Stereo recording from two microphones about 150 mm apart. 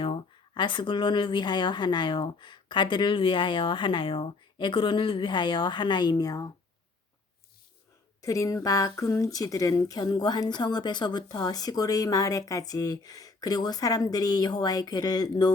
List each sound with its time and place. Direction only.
0.0 s speech: 35° left (ahead or behind)
8.2 s speech: 20° left (ahead or behind)